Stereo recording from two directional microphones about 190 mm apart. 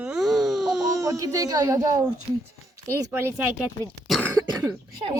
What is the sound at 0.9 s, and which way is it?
Speech, 15° right (ahead or behind).